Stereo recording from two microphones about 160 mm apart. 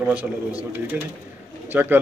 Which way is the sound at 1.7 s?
10° right (ahead or behind).